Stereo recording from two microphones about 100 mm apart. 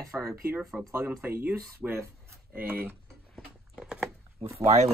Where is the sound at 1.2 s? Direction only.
25° right (ahead or behind).